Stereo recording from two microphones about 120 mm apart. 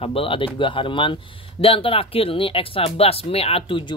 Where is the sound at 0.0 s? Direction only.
50° left (ahead or behind).